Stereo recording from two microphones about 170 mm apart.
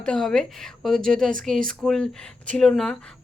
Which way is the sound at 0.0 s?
5° left (ahead or behind).